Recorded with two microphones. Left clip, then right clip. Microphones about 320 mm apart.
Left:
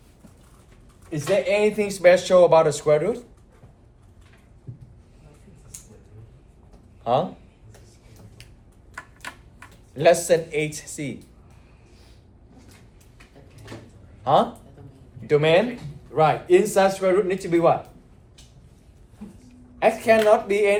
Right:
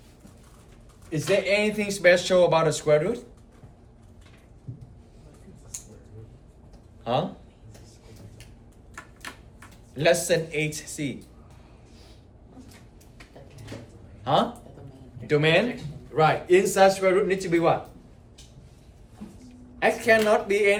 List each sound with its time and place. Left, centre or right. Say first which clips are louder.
1.1 s speech: left 2 dB; centre
7.0 s speech: left 5 dB; centre
9.9 s speech: left 4 dB; centre
14.3 s speech: left 4 dB; centre
19.8 s speech: left 3 dB; centre